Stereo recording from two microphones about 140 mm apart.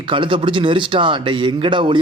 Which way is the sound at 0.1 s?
35° right (ahead or behind).